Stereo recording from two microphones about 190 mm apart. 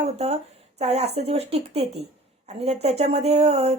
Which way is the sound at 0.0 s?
35° right (ahead or behind).